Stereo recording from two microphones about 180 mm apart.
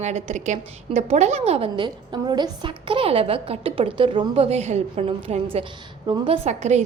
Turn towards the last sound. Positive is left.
turn(degrees=-40)  # may be behind; listen again after turning